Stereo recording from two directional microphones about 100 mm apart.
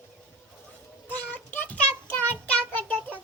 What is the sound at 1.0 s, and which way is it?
Child singing, 20° left (ahead or behind).